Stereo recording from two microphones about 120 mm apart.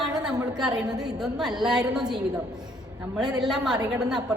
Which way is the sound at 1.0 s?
5° right (ahead or behind).